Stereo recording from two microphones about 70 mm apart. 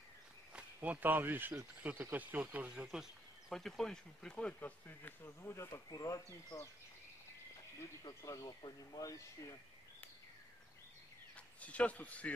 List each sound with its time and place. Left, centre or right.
0.8 s speech: right
2.7 s speech: centre
3.4 s speech: centre; by 5.1 s left
5.2 s speech: left
5.9 s speech: left
6.5 s speech: left
8.1 s speech: left
8.6 s speech: left
11.3 s a man's voice: centre